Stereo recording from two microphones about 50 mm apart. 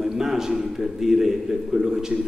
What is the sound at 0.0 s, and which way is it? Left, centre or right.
A man's voice, centre.